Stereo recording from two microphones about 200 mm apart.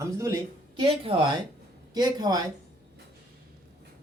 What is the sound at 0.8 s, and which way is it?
Speech, 25° right (ahead or behind).